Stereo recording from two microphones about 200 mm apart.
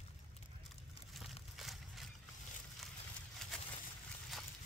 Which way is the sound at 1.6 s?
Centre (ahead or behind).